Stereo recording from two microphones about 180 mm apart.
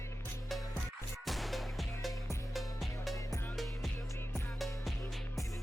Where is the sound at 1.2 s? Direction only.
Centre (ahead or behind).